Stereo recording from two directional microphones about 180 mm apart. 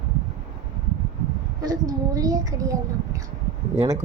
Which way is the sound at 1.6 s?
20° right (ahead or behind).